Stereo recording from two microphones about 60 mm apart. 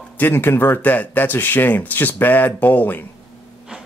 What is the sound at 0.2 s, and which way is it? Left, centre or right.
Speech, left.